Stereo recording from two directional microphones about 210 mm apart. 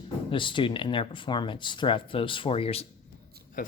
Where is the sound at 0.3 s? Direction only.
25° left (ahead or behind).